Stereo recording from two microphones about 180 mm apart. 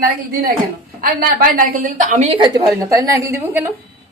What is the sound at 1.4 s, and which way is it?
A woman's voice, 50° right (ahead or behind).